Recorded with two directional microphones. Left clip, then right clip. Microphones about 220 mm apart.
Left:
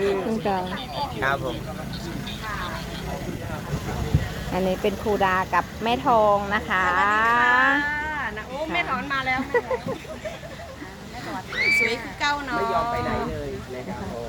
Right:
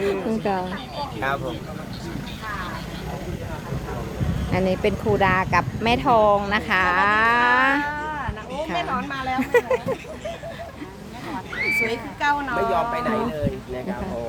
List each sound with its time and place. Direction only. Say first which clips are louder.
0.0 s a sound: even; 5° right (ahead or behind)
1.2 s speech: even; 5° left (ahead or behind)
4.5 s speech: right 2 dB; 5° right (ahead or behind); by 9.6 s 25° right (ahead or behind)
11.9 s speech: right 2 dB; 35° right (ahead or behind)